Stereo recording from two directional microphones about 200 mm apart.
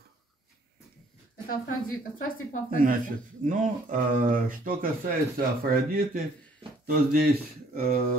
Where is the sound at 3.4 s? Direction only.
40° right (ahead or behind).